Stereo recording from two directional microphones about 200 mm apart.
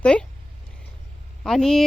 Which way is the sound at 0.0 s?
5° left (ahead or behind).